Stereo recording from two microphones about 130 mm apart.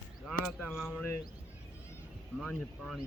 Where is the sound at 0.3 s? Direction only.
Centre (ahead or behind).